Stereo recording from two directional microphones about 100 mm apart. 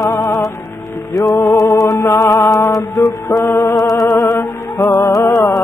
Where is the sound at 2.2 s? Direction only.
30° left (ahead or behind).